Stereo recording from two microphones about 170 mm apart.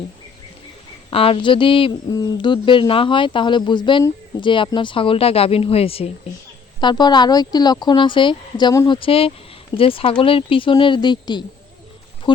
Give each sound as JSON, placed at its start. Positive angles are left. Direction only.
{"t": 1.1, "sound": "speech", "side_deg": 35}
{"t": 9.0, "sound": "speech", "side_deg": 35}